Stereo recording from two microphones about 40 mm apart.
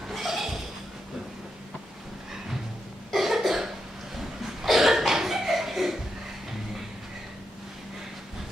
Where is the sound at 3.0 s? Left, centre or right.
Centre.